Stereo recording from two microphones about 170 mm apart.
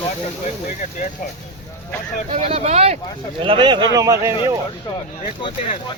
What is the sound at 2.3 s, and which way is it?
Speech, 35° right (ahead or behind).